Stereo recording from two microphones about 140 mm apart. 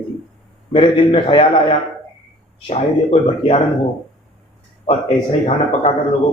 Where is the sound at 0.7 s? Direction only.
40° left (ahead or behind).